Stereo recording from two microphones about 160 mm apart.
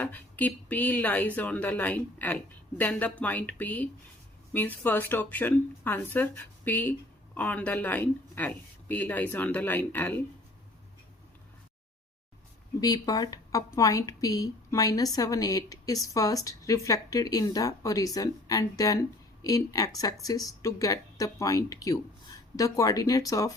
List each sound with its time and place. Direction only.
0.0 s speech: 10° left (ahead or behind)
12.8 s a woman's voice: 25° left (ahead or behind)